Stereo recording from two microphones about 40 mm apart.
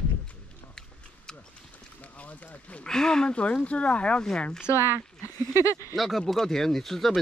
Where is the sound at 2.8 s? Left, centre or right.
Centre.